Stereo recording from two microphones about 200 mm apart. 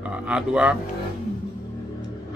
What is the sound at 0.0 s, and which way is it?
Speech, 5° right (ahead or behind).